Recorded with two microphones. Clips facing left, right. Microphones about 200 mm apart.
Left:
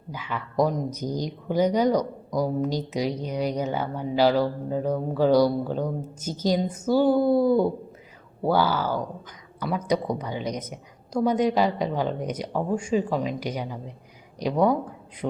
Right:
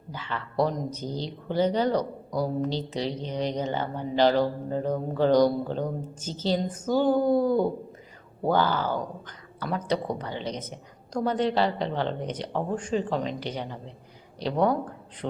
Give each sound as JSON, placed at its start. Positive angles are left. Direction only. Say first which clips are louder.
{"t": 0.1, "sound": "a man's voice", "louder": "left 2 dB", "side_deg": 10}